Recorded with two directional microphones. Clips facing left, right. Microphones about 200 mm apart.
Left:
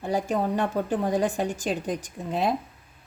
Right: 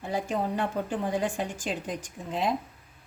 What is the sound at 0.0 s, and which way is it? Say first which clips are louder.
A woman's voice: left 4 dB; 40° left (ahead or behind).